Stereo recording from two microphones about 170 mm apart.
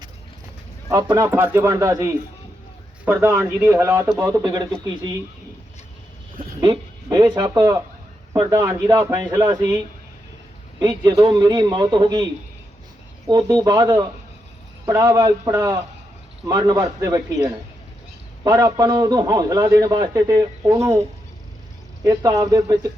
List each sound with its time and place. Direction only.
0.9 s a man's voice: 20° right (ahead or behind)
6.4 s a man's voice: 25° right (ahead or behind)
22.0 s a man's voice: 20° right (ahead or behind)